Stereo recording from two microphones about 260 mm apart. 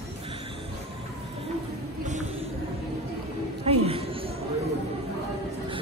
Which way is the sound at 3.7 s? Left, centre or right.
Right.